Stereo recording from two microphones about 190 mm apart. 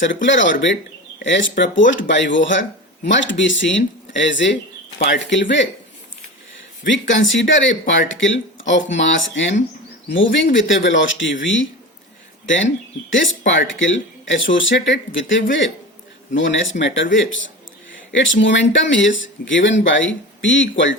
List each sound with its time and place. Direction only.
0.0 s speech: 75° left (ahead or behind)
6.8 s speech: 80° left
13.1 s speech: 85° left